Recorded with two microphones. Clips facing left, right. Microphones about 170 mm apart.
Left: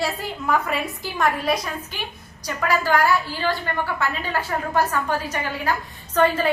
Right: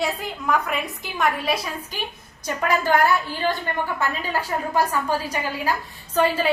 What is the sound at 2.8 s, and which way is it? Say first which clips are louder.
A woman's voice: right 1 dB; 20° right (ahead or behind).